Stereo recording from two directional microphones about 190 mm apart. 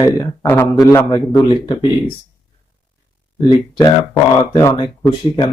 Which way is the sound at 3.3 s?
25° left (ahead or behind).